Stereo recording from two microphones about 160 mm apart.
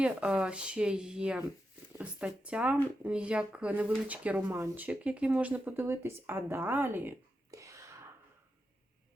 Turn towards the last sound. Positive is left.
turn(degrees=-20)  # may be behind; listen again after turning